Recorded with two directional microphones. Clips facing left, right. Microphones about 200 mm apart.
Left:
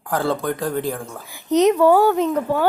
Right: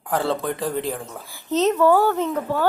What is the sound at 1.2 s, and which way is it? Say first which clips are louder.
Speech: left 5 dB; 15° left (ahead or behind).